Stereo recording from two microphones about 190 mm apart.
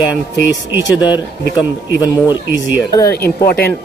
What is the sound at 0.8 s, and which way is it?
Speech, 25° left (ahead or behind).